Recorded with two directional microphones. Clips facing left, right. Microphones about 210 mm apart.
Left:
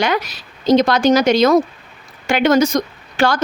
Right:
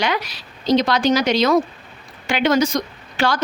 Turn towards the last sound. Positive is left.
turn(degrees=45)  # may be behind; listen again after turning